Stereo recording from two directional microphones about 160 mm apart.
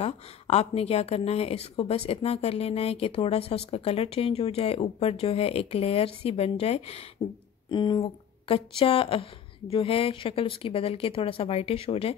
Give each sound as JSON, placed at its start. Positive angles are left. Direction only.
{"t": 0.0, "sound": "a woman's voice", "side_deg": 40}
{"t": 7.7, "sound": "a woman's voice", "side_deg": 30}